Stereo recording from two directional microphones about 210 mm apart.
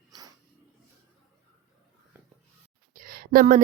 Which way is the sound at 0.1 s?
20° right (ahead or behind).